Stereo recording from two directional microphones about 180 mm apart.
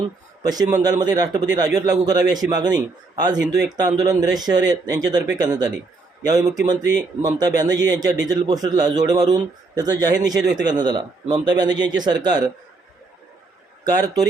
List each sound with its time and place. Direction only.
0.4 s speech: 20° right (ahead or behind)
13.8 s speech: 20° right (ahead or behind)